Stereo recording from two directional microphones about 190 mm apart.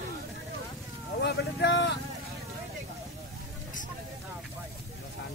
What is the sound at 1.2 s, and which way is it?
Vehicle, 65° left (ahead or behind).